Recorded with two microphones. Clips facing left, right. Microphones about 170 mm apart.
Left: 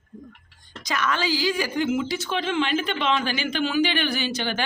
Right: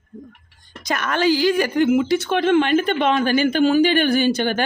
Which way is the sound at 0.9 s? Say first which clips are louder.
Right 6 dB; 55° right (ahead or behind).